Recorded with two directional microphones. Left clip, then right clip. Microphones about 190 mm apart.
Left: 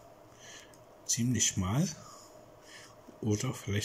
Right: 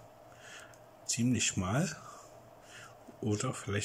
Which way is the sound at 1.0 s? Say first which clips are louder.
Left 1 dB; 5° right (ahead or behind).